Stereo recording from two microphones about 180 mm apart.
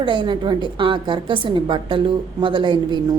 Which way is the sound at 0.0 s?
25° right (ahead or behind).